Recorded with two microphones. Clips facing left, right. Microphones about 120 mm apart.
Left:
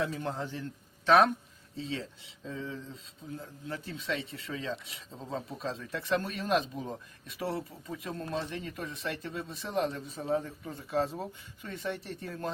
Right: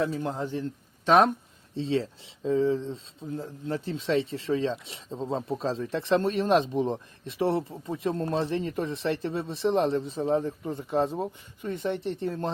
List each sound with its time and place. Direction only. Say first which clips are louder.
0.1 s speech: right 5 dB; 10° right (ahead or behind)
1.7 s speech: right 10 dB; 30° right (ahead or behind)